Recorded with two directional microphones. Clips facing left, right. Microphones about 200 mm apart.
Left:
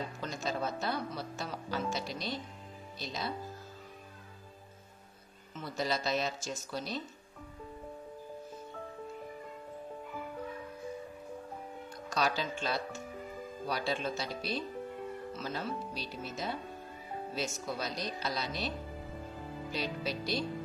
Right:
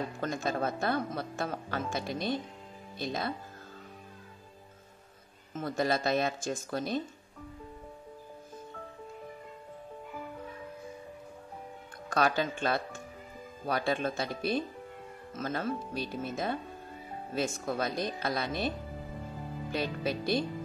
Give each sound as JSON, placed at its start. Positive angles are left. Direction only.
{"t": 0.2, "sound": "a woman's voice", "side_deg": -55}
{"t": 5.5, "sound": "a woman's voice", "side_deg": -50}
{"t": 12.1, "sound": "a woman's voice", "side_deg": -55}
{"t": 19.7, "sound": "a woman's voice", "side_deg": -55}